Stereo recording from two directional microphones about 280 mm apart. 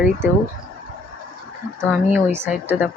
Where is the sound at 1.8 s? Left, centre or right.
Centre.